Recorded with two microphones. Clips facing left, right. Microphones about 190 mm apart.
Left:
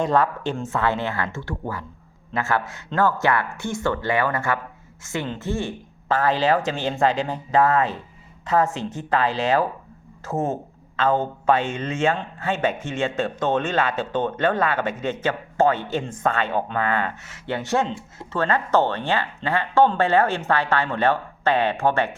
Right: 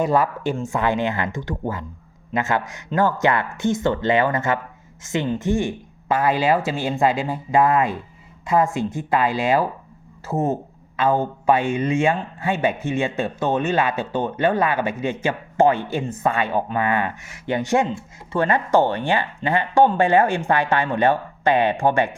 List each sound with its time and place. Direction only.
0.0 s speech: 10° right (ahead or behind)